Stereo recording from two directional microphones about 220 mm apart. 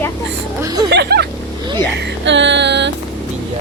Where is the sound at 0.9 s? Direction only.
50° right (ahead or behind).